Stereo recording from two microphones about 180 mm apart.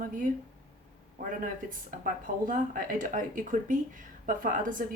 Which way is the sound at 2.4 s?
50° right (ahead or behind).